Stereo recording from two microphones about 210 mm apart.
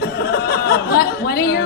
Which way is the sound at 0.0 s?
45° left (ahead or behind).